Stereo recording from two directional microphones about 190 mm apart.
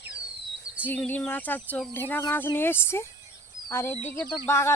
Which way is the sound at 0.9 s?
10° left (ahead or behind).